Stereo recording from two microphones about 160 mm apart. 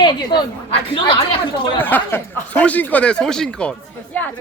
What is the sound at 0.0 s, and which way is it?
Speech, 30° left (ahead or behind).